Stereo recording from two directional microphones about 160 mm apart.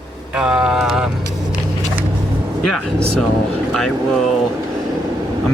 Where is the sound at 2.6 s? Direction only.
5° left (ahead or behind).